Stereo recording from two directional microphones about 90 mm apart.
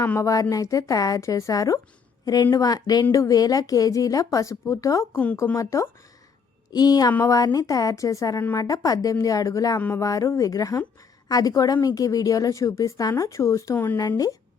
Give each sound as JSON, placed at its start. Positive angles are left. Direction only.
{"t": 0.2, "sound": "a woman's voice", "side_deg": 40}
{"t": 5.1, "sound": "speech", "side_deg": 15}
{"t": 5.5, "sound": "a woman's voice", "side_deg": 35}
{"t": 6.7, "sound": "a woman's voice", "side_deg": 45}